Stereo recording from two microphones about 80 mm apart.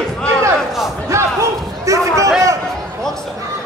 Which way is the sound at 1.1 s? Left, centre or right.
Right.